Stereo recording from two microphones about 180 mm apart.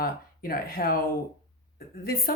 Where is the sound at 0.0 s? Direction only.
55° left (ahead or behind).